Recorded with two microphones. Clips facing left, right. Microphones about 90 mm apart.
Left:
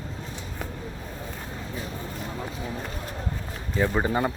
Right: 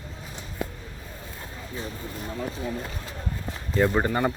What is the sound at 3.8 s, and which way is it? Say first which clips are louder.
Speech: right 2 dB; centre (ahead or behind).